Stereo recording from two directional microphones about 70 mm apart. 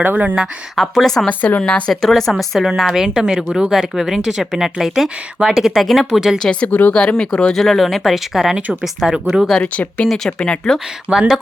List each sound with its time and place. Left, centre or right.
0.0 s speech: right
0.3 s a woman's voice: centre
1.3 s speech: left
1.9 s a woman's voice: centre
6.4 s speech: centre
6.9 s a woman's voice: centre
9.5 s speech: centre
11.1 s speech: centre